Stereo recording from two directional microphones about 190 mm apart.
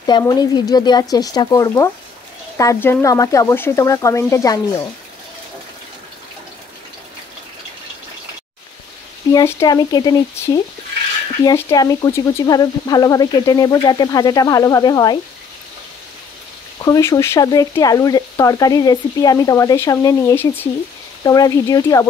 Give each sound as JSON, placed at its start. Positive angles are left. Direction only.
{"t": 0.0, "sound": "speech", "side_deg": 20}
{"t": 9.3, "sound": "speech", "side_deg": 15}
{"t": 16.8, "sound": "speech", "side_deg": 20}